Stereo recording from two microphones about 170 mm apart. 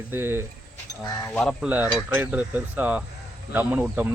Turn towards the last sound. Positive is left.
turn(degrees=-10)  # may be behind; listen again after turning